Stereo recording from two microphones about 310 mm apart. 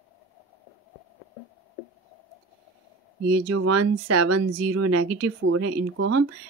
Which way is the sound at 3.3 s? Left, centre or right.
Right.